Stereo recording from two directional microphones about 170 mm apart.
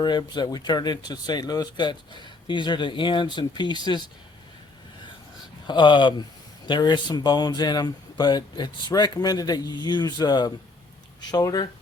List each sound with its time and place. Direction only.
0.0 s speech: 25° left (ahead or behind)
5.6 s speech: 25° left (ahead or behind)